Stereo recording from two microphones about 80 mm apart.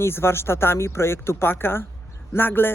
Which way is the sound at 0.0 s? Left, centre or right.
Left.